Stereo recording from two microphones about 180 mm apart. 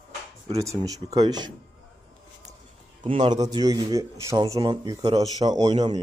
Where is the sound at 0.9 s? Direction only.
20° right (ahead or behind).